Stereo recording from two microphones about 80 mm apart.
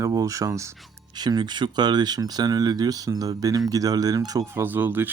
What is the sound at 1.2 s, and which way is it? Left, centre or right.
A man's voice, right.